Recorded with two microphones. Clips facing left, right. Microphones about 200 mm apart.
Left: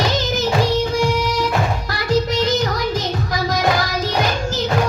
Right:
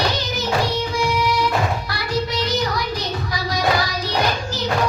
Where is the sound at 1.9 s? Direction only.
45° left (ahead or behind).